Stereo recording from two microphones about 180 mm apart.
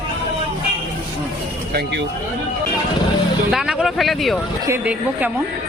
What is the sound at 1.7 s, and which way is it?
Speech, 70° right (ahead or behind).